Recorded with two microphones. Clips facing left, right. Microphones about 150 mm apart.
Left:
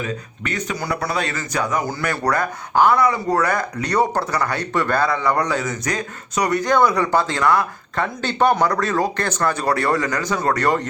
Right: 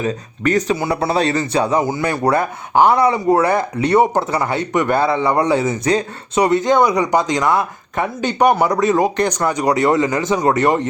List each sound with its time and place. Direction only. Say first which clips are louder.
0.0 s speech: right 8 dB; 35° right (ahead or behind)
0.8 s speech: right 6 dB; 25° right (ahead or behind)